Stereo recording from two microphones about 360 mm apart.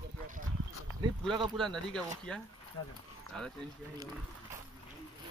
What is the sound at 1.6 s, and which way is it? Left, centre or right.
Speech, centre.